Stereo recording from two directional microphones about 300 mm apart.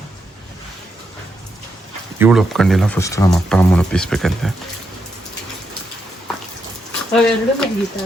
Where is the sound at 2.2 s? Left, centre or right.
Centre.